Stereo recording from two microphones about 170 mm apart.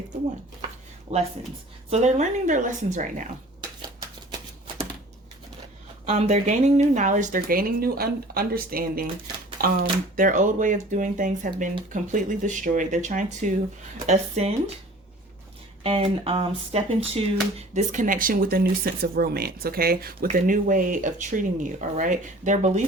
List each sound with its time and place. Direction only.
1.1 s speech: 40° right (ahead or behind)
6.1 s speech: 40° right (ahead or behind)
15.8 s speech: 35° right (ahead or behind)
17.7 s speech: 50° right (ahead or behind)